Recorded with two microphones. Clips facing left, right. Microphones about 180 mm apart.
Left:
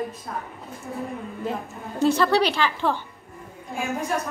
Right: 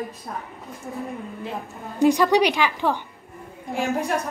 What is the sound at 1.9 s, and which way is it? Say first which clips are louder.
A woman's voice: right 2 dB; 15° right (ahead or behind).